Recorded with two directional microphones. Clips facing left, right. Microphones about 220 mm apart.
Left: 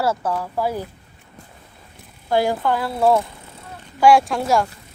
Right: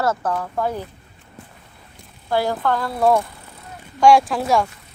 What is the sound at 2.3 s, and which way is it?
Speech, 15° left (ahead or behind).